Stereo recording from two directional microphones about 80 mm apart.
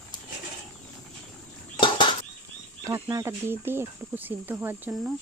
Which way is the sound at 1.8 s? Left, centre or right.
Left.